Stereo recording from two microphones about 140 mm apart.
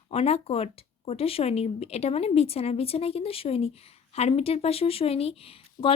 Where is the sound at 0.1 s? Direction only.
45° left (ahead or behind).